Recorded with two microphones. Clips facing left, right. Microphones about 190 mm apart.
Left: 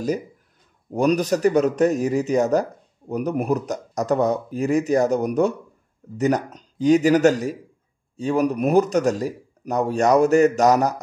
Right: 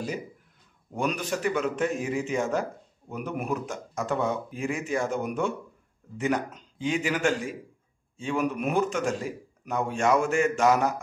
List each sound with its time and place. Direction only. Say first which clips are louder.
0.9 s speech: left 10 dB; 40° left (ahead or behind)